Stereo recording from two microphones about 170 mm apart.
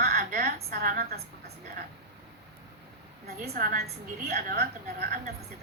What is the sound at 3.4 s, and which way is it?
A woman's voice, 60° right (ahead or behind).